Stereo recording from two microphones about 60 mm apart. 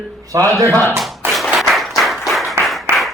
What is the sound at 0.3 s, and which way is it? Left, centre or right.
Speech, right.